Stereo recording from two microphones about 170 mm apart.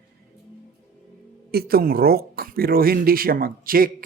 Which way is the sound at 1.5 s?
60° right (ahead or behind).